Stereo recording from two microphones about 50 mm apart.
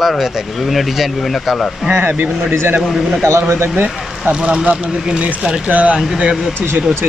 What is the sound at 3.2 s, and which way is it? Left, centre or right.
Speech, right.